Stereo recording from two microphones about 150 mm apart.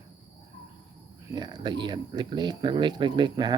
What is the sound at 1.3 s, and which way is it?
Speech, 30° right (ahead or behind).